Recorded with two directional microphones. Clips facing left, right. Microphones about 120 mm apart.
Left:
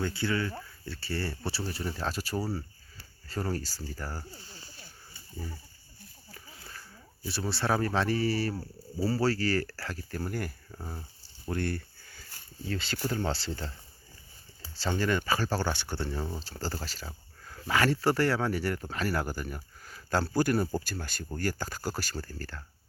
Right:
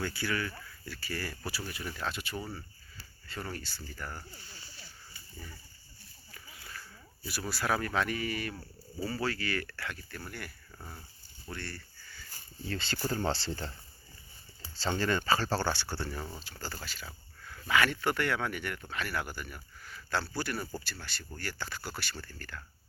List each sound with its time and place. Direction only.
0.0 s speech: 25° left (ahead or behind)
4.4 s a sound: 35° left (ahead or behind)
5.1 s wild animals: 30° left (ahead or behind)
6.3 s a sound: 30° left (ahead or behind)
7.3 s speech: 30° left (ahead or behind)
10.7 s speech: 25° left (ahead or behind)
11.4 s a sound: 50° left (ahead or behind)
12.6 s speech: 5° left (ahead or behind)
16.4 s speech: 35° left (ahead or behind)